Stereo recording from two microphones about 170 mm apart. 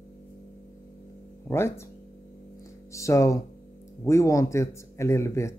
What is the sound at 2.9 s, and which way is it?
Speech, 15° left (ahead or behind).